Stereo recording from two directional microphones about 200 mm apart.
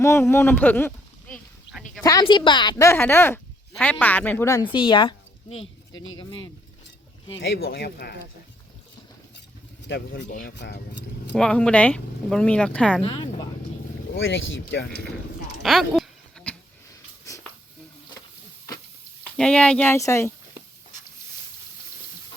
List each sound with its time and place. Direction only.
0.0 s speech: 10° left (ahead or behind)
2.0 s a woman's voice: 20° left (ahead or behind)
5.9 s speech: 75° left (ahead or behind)
6.1 s a woman's voice: 25° left (ahead or behind)
7.6 s speech: 50° left (ahead or behind)
9.8 s speech: 60° left (ahead or behind)
10.2 s speech: 40° left (ahead or behind)
11.3 s speech: 5° left (ahead or behind)
13.0 s a woman's voice: 25° left (ahead or behind)
14.2 s speech: 75° left (ahead or behind)
14.6 s speech: 55° left (ahead or behind)
15.6 s a sound: centre (ahead or behind)
19.2 s speech: 5° left (ahead or behind)